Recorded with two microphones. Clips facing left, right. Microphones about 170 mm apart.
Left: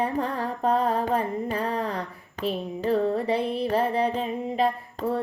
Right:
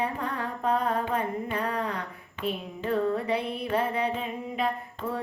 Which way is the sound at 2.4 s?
35° left (ahead or behind).